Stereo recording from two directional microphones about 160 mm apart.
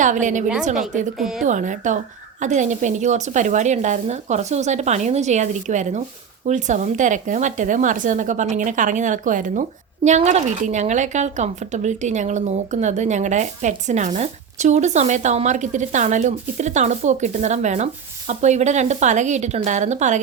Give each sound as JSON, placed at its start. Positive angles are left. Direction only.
{"t": 0.0, "sound": "a woman's voice", "side_deg": -50}